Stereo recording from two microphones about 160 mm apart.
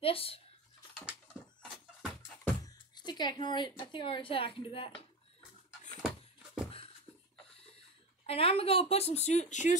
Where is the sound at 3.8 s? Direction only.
30° left (ahead or behind).